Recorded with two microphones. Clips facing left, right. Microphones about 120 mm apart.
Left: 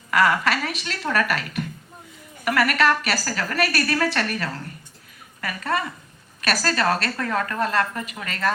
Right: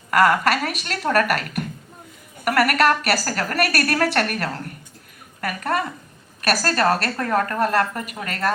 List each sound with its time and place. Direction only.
0.1 s a woman's voice: 50° right (ahead or behind)